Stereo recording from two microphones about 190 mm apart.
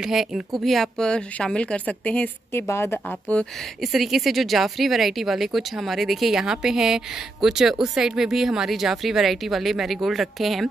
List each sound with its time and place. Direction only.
0.0 s a woman's voice: centre (ahead or behind)